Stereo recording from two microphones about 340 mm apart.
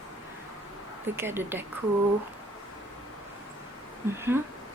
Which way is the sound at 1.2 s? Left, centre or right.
Centre.